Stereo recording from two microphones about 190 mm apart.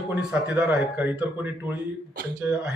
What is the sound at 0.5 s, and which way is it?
Speech, 10° right (ahead or behind).